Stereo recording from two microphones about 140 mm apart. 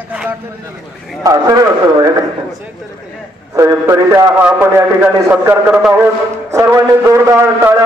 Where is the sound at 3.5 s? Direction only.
20° right (ahead or behind).